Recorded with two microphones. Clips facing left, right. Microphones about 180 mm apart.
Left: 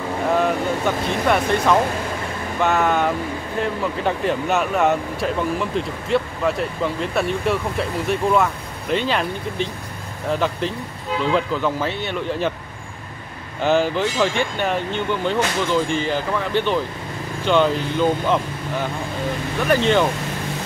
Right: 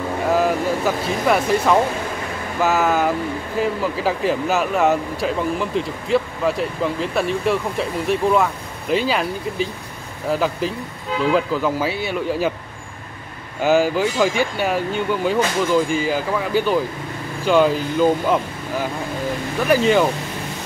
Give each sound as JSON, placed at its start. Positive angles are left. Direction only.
{"t": 0.3, "sound": "speech", "side_deg": -5}
{"t": 13.6, "sound": "speech", "side_deg": -5}